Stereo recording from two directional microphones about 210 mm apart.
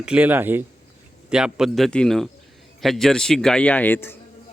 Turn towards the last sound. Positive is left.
turn(degrees=10)  # may be behind; listen again after turning